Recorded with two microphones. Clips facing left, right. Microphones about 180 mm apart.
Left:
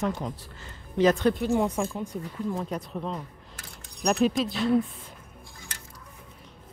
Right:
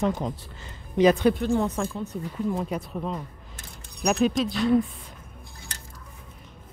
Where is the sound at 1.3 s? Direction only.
10° left (ahead or behind).